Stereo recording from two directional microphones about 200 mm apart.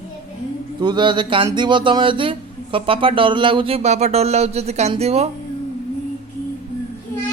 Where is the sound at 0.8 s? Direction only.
25° right (ahead or behind).